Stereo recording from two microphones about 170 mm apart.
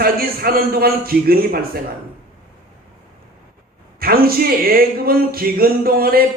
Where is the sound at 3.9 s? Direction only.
60° right (ahead or behind).